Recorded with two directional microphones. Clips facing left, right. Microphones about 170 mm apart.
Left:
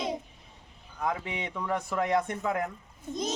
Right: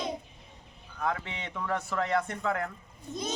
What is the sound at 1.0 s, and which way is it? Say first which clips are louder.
Speech: left 1 dB; 10° left (ahead or behind).